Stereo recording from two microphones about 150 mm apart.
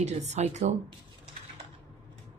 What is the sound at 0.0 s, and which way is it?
Speech, 50° right (ahead or behind).